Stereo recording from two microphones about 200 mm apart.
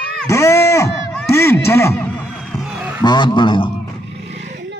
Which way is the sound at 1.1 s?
10° left (ahead or behind).